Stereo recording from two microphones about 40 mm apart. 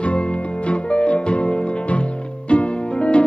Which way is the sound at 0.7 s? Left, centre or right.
Left.